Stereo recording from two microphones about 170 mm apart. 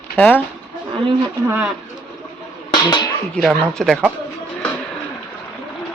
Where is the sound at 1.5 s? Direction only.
10° right (ahead or behind).